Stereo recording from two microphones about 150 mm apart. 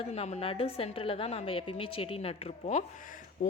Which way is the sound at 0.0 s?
45° left (ahead or behind).